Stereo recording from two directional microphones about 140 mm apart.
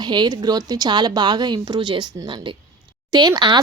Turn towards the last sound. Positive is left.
turn(degrees=-30)  # may be behind; listen again after turning